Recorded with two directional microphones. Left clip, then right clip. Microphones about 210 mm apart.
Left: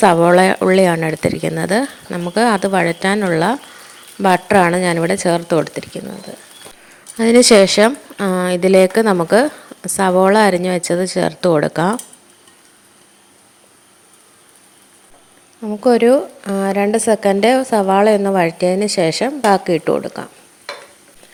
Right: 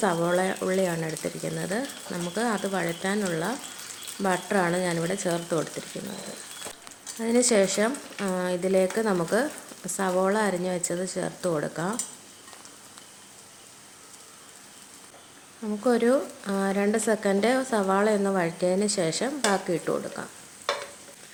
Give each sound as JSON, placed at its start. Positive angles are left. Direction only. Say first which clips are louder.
{"t": 0.0, "sound": "speech", "louder": "left 14 dB", "side_deg": 45}
{"t": 7.2, "sound": "speech", "louder": "left 13 dB", "side_deg": 40}
{"t": 15.6, "sound": "speech", "louder": "left 11 dB", "side_deg": 25}